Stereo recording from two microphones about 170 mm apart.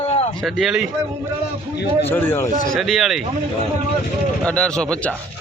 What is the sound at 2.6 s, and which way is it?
Speech, centre (ahead or behind).